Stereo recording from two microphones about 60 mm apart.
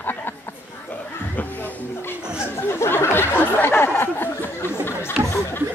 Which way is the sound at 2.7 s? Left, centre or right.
Left.